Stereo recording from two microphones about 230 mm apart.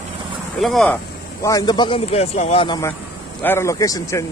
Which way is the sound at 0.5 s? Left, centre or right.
Centre.